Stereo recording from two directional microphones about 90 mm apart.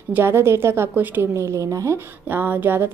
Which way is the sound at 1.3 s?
35° right (ahead or behind).